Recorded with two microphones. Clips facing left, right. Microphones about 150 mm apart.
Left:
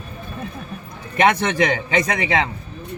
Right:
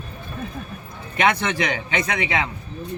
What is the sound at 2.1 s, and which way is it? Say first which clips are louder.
Speech: left 3 dB; 40° left (ahead or behind).